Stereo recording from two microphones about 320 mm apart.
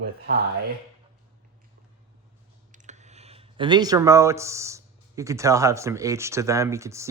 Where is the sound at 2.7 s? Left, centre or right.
Right.